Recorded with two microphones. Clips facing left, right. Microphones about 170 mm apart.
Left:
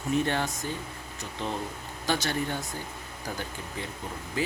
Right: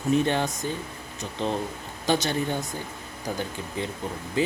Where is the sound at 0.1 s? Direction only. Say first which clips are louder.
Right 4 dB; 20° right (ahead or behind).